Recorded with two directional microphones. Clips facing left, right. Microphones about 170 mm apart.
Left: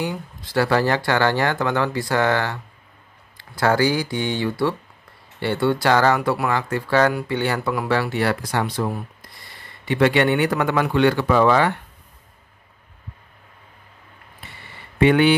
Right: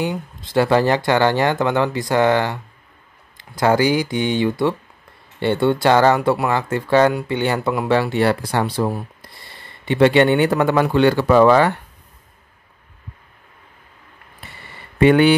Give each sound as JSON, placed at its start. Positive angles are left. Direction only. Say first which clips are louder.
{"t": 0.0, "sound": "speech", "louder": "right 3 dB", "side_deg": -20}
{"t": 15.0, "sound": "speech", "louder": "right 3 dB", "side_deg": -45}